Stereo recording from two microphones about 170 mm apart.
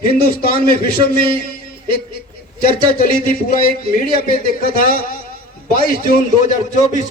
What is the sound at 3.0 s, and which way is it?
Speech, 55° left (ahead or behind).